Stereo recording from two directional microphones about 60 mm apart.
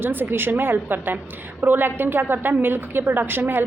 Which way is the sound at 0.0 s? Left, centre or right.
Right.